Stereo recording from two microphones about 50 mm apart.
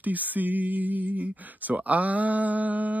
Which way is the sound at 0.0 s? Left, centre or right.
Right.